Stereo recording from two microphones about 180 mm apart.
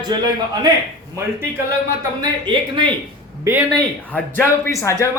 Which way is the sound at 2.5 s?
25° right (ahead or behind).